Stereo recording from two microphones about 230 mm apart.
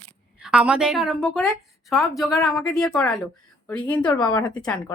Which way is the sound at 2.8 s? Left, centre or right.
Centre.